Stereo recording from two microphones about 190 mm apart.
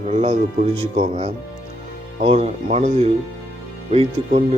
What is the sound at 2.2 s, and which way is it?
Speech, 30° right (ahead or behind).